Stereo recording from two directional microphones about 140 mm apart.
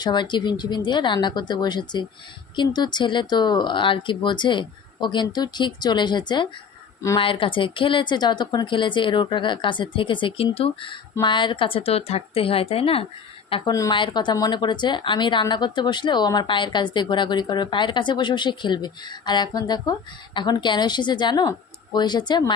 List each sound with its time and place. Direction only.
0.0 s speech: 35° left (ahead or behind)
13.7 s a woman's voice: 25° left (ahead or behind)
13.9 s speech: 35° left (ahead or behind)